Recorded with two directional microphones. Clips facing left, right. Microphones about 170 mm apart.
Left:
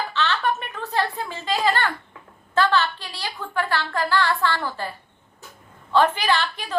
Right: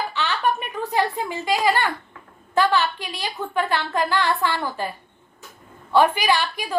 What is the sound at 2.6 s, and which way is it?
A woman's voice, 15° right (ahead or behind).